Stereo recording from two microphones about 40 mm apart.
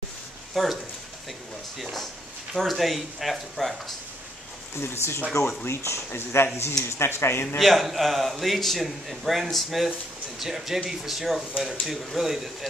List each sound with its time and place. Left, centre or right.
0.5 s a man's voice: centre
1.8 s a man's voice: centre
4.7 s speech: left
7.5 s a man's voice: centre